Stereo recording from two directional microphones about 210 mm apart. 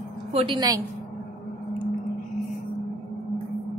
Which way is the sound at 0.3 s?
25° right (ahead or behind).